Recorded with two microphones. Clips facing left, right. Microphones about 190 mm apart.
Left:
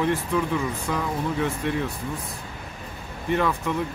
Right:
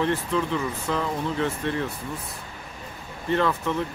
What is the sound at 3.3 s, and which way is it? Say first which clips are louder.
Speech: even; 10° left (ahead or behind).